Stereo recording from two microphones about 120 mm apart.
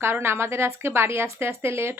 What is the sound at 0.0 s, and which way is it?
Speech, 20° right (ahead or behind).